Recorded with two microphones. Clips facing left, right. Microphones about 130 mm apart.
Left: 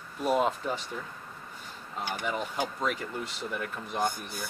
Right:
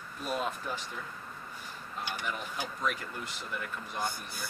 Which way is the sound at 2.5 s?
55° left (ahead or behind).